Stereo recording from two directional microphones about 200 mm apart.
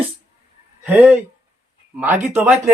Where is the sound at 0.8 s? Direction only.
5° right (ahead or behind).